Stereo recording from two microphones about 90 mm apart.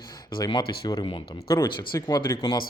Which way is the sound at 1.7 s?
50° left (ahead or behind).